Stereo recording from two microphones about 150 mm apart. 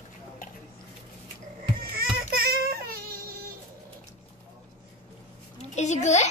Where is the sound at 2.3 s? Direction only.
90° right.